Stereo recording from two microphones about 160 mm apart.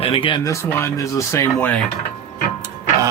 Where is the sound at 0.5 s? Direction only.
15° left (ahead or behind).